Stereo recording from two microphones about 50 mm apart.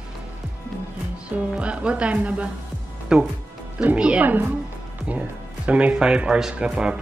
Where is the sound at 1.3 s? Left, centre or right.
Right.